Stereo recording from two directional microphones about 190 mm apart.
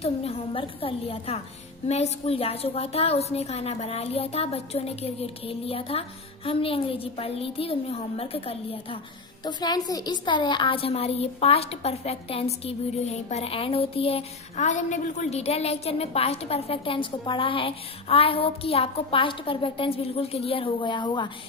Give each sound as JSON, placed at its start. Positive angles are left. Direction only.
{"t": 0.0, "sound": "a woman's voice", "side_deg": 30}